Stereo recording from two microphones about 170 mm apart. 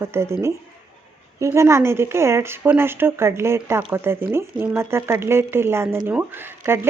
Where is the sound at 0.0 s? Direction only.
15° right (ahead or behind).